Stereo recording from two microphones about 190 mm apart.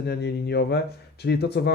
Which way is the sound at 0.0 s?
60° left (ahead or behind).